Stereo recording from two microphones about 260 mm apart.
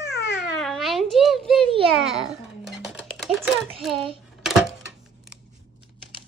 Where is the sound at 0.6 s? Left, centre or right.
Centre.